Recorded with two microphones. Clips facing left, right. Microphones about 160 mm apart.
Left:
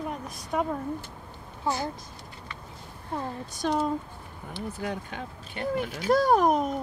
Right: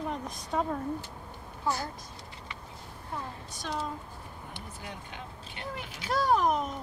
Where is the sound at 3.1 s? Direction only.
45° left (ahead or behind).